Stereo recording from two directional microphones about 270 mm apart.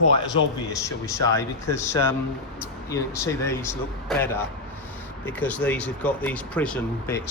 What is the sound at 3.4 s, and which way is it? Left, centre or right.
A man's voice, centre.